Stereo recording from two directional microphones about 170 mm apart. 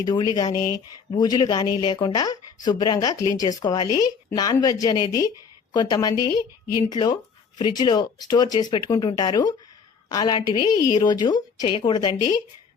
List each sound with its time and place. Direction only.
0.0 s speech: 20° left (ahead or behind)